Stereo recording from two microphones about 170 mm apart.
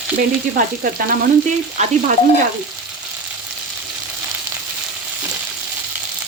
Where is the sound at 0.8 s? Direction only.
55° right (ahead or behind).